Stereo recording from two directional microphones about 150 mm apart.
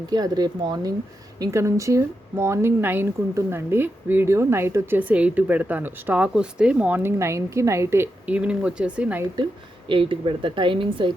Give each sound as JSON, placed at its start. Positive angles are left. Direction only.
{"t": 0.1, "sound": "speech", "side_deg": -25}
{"t": 9.9, "sound": "a woman's voice", "side_deg": -35}